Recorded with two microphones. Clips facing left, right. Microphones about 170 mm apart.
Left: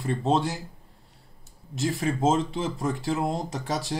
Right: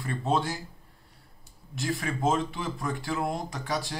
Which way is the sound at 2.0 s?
30° left (ahead or behind).